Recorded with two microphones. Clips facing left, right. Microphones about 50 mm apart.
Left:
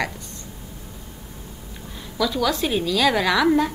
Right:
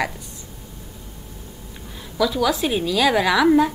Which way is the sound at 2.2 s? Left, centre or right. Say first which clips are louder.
Right 2 dB; centre.